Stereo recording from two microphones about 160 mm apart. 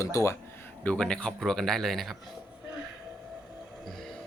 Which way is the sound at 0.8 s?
5° left (ahead or behind).